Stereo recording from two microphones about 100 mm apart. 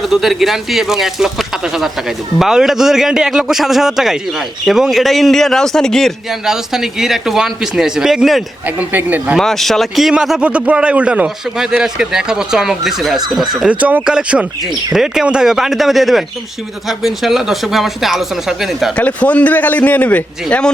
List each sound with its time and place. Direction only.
0.0 s a man's voice: centre (ahead or behind)
8.6 s speech: 15° right (ahead or behind)
9.4 s a man's voice: 5° left (ahead or behind)
13.7 s a man's voice: 15° right (ahead or behind)
18.9 s a man's voice: 15° left (ahead or behind)